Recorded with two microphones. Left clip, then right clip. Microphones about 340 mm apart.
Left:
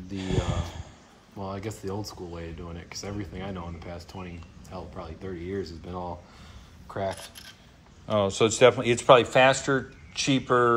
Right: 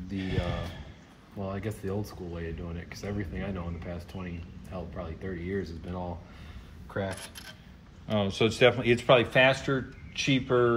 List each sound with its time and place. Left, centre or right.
0.1 s speech: centre
6.9 s coin: centre
8.1 s speech: centre